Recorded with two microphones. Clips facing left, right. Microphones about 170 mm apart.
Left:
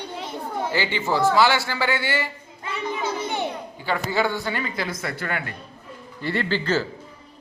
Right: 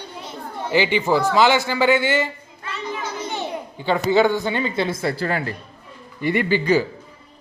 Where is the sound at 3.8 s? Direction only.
20° right (ahead or behind).